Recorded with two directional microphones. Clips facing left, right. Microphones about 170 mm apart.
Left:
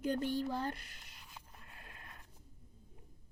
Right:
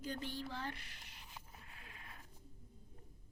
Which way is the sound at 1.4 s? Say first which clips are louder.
Even; centre (ahead or behind).